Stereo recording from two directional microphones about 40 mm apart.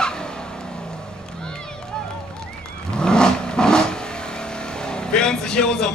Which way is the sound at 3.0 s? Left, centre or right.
Centre.